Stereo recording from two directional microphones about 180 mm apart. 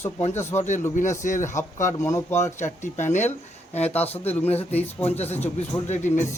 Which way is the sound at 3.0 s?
40° left (ahead or behind).